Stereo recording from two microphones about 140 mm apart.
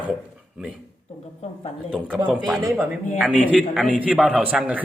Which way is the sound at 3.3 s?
10° right (ahead or behind).